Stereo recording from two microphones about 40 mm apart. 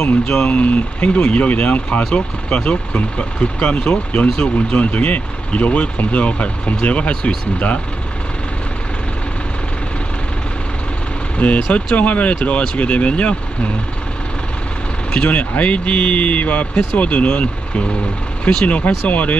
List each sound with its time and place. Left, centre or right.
0.5 s speech: left
11.3 s speech: left
15.2 s speech: left
18.5 s speech: left
19.0 s speech: left